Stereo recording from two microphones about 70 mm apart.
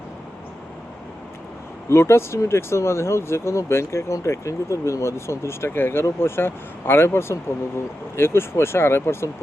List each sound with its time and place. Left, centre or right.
1.9 s speech: left